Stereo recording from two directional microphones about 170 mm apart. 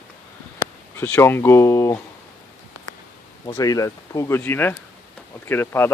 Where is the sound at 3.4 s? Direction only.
20° left (ahead or behind).